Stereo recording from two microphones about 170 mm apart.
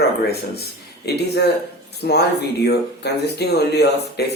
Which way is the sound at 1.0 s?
75° left (ahead or behind).